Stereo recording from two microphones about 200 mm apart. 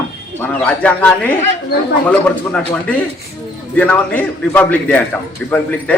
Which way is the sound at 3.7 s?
10° left (ahead or behind).